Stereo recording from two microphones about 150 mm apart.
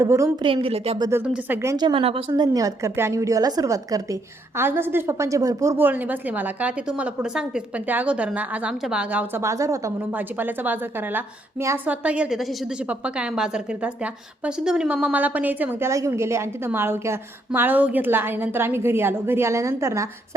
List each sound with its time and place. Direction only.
0.0 s a woman's voice: 20° right (ahead or behind)
0.4 s a woman's voice: 35° right (ahead or behind)
0.9 s a woman's voice: 25° right (ahead or behind)
1.2 s a woman's voice: 15° right (ahead or behind)
1.7 s a woman's voice: 30° right (ahead or behind)
2.3 s a woman's voice: 25° right (ahead or behind)
12.0 s a woman's voice: 5° right (ahead or behind)